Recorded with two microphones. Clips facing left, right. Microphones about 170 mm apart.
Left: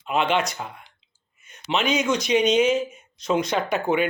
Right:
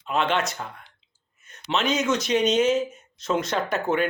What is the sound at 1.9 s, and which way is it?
Speech, centre (ahead or behind).